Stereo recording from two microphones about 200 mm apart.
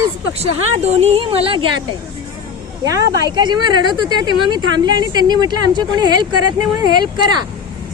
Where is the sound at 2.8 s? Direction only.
15° right (ahead or behind).